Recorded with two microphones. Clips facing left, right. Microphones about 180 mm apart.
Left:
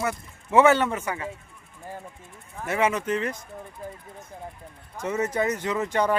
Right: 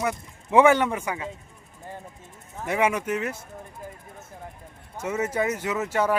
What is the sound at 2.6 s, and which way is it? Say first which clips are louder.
Speech: even; 15° right (ahead or behind).